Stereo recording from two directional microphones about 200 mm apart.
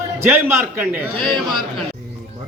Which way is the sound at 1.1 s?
25° right (ahead or behind).